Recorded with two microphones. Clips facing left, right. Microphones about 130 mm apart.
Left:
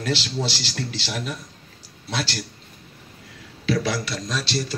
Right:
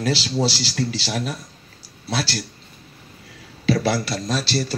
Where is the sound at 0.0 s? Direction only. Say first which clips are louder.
Right 4 dB; 35° right (ahead or behind).